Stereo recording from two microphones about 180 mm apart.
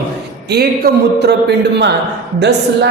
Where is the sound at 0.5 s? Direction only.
60° right (ahead or behind).